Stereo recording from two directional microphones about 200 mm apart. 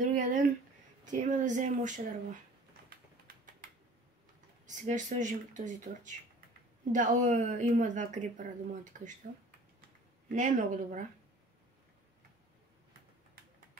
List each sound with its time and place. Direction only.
0.1 s a woman's voice: 40° right (ahead or behind)
4.6 s a woman's voice: 40° right (ahead or behind)
10.2 s a woman's voice: 40° right (ahead or behind)